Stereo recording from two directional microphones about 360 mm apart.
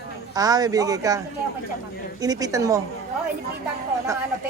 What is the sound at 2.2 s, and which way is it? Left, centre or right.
Speech, centre.